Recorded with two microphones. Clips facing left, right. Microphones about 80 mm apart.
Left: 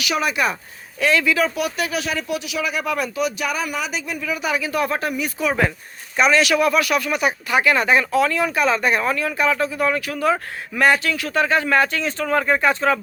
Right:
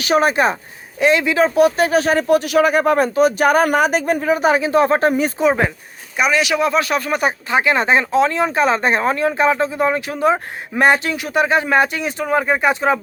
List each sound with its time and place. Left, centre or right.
0.0 s speech: right
0.9 s speech: right
5.4 s speech: right
6.1 s speech: centre; by 7.3 s right
7.5 s speech: right